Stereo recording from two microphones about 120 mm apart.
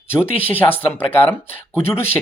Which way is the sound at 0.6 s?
25° left (ahead or behind).